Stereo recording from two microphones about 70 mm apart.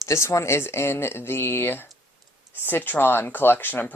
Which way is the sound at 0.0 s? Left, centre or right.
Left.